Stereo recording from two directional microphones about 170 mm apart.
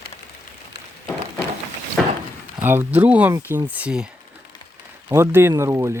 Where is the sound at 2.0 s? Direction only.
Centre (ahead or behind).